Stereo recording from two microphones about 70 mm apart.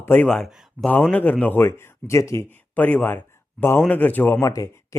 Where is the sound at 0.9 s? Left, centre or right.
Left.